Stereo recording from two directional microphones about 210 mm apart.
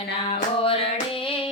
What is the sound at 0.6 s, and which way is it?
Music, 25° left (ahead or behind).